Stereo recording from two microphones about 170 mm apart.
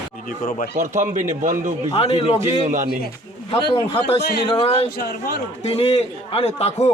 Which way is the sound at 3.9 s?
35° left (ahead or behind).